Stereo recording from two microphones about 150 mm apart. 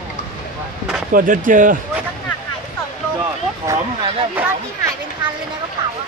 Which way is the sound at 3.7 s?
20° right (ahead or behind).